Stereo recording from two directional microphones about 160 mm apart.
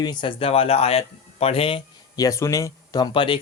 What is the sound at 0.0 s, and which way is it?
Speech, 30° left (ahead or behind).